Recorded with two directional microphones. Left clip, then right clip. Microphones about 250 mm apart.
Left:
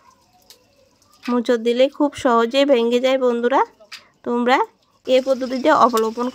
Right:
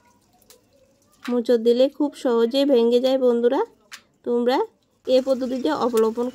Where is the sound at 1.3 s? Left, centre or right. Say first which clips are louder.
Even; centre.